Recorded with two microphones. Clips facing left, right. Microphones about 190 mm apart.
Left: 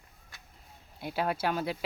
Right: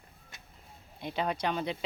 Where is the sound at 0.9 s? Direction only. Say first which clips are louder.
Left 1 dB; 5° left (ahead or behind).